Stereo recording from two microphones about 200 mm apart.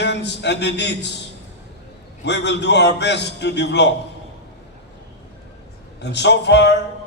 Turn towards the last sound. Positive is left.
turn(degrees=60)  # may be behind; listen again after turning